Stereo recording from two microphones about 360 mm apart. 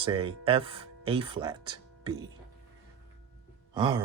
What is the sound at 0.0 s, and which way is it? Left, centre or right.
Speech, centre.